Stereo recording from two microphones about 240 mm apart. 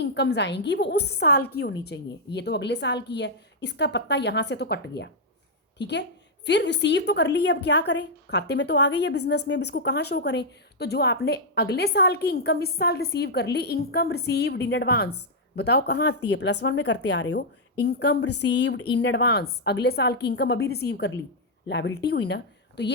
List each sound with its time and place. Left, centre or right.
0.0 s a woman's voice: left